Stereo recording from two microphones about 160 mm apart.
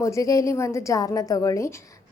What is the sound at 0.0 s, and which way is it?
A woman's voice, 20° left (ahead or behind).